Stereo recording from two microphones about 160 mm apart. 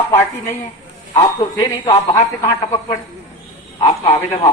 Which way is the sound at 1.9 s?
20° left (ahead or behind).